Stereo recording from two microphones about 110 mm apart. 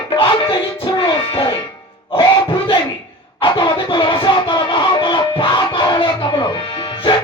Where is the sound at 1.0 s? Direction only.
55° left (ahead or behind).